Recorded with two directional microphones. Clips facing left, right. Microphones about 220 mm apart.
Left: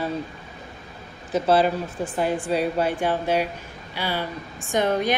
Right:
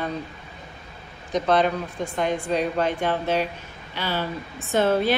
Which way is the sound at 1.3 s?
5° left (ahead or behind).